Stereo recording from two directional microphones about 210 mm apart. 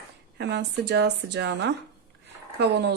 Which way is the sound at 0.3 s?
55° right (ahead or behind).